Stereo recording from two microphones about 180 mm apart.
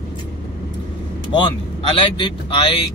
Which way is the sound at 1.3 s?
25° left (ahead or behind).